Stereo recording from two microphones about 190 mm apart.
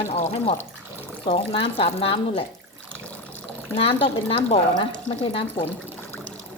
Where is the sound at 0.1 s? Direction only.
35° left (ahead or behind).